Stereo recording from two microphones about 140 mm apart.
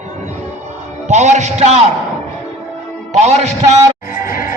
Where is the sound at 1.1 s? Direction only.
55° right (ahead or behind).